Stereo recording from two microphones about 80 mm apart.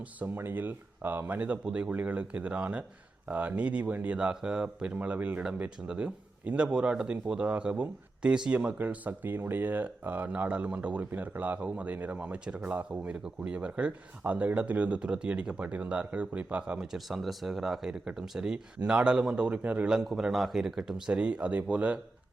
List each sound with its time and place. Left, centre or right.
0.0 s speech: right